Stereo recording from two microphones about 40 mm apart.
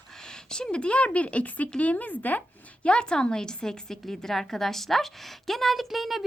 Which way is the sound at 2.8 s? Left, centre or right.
Left.